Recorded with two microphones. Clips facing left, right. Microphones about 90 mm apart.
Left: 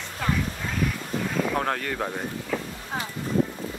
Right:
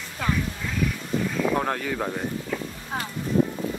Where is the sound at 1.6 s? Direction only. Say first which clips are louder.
Right 1 dB; 5° right (ahead or behind).